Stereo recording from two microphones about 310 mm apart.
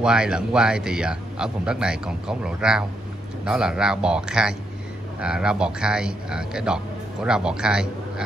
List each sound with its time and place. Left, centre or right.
0.0 s speech: centre